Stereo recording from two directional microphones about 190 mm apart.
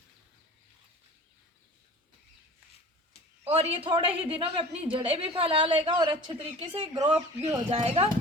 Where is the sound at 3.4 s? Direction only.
30° right (ahead or behind).